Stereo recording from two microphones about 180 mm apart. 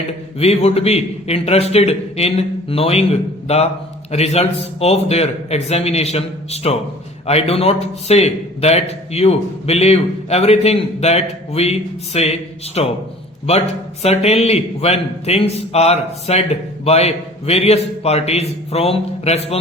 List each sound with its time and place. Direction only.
0.3 s a man's voice: 35° left (ahead or behind)